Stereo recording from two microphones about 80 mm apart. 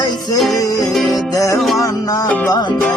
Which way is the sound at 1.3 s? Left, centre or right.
Left.